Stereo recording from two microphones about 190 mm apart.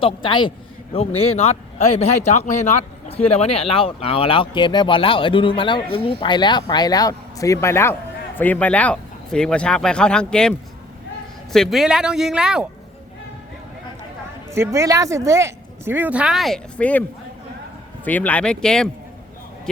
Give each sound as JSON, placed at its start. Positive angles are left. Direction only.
{"t": 0.0, "sound": "speech", "side_deg": 25}
{"t": 11.5, "sound": "speech", "side_deg": 0}
{"t": 14.5, "sound": "speech", "side_deg": -15}
{"t": 18.0, "sound": "speech", "side_deg": 10}